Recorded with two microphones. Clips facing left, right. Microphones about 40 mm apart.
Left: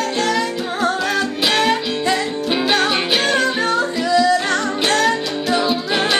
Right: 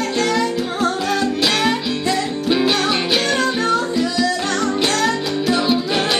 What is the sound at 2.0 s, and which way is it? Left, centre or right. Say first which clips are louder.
Music: even; centre.